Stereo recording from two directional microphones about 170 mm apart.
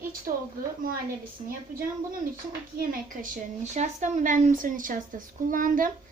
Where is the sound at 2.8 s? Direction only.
50° right (ahead or behind).